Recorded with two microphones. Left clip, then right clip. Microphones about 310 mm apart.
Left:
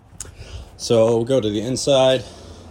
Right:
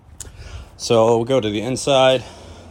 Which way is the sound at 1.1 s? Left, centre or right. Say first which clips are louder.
Right 1 dB; centre.